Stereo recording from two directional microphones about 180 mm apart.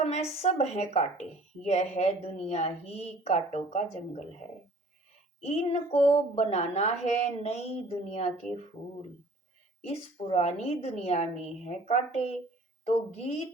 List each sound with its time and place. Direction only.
0.0 s speech: 35° left (ahead or behind)
5.4 s speech: 35° left (ahead or behind)
9.8 s speech: 35° left (ahead or behind)